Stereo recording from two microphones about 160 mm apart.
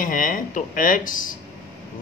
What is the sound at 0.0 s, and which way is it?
A man's voice, 60° left (ahead or behind).